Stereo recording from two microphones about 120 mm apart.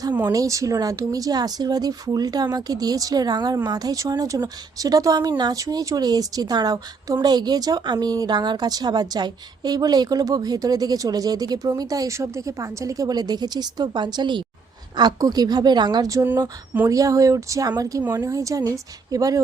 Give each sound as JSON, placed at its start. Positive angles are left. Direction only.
{"t": 0.3, "sound": "a woman's voice", "side_deg": -30}